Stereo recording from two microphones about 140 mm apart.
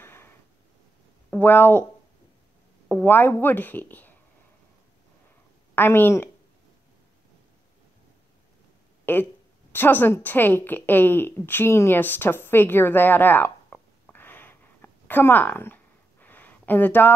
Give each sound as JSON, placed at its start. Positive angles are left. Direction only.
{"t": 0.0, "sound": "a sound", "side_deg": 15}
{"t": 1.3, "sound": "speech", "side_deg": 15}
{"t": 2.9, "sound": "a woman's voice", "side_deg": 15}
{"t": 5.8, "sound": "a woman's voice", "side_deg": 15}
{"t": 9.0, "sound": "a woman's voice", "side_deg": 15}